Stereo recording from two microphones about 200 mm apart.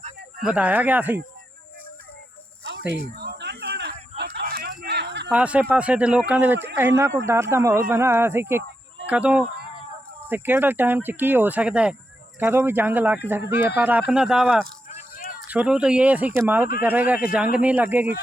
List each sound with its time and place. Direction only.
0.4 s speech: 5° right (ahead or behind)
2.6 s snake: 60° right (ahead or behind)
4.2 s a sound: 55° right (ahead or behind)
5.3 s speech: 5° right (ahead or behind)
15.1 s a sound: 45° left (ahead or behind)
15.4 s speech: 5° right (ahead or behind)